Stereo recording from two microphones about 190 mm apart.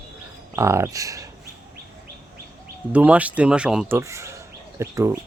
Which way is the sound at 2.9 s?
5° right (ahead or behind).